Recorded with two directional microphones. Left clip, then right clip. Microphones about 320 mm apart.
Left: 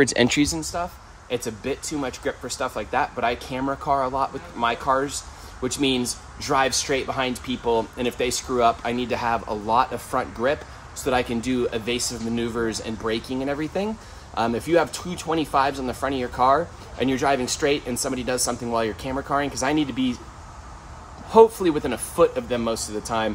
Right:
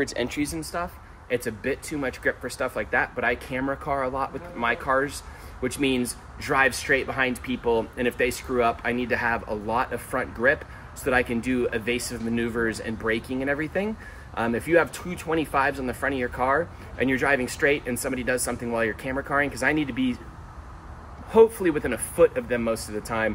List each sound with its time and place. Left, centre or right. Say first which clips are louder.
0.0 s speech: left 8 dB; left
1.3 s speech: even; centre
21.3 s speech: left 3 dB; centre